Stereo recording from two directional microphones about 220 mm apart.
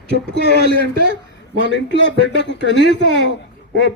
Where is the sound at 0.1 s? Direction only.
50° left (ahead or behind).